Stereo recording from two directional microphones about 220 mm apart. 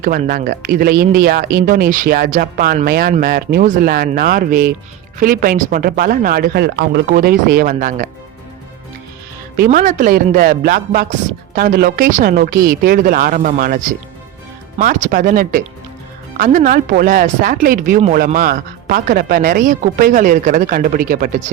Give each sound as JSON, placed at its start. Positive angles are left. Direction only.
{"t": 0.0, "sound": "speech", "side_deg": -40}
{"t": 9.6, "sound": "speech", "side_deg": -35}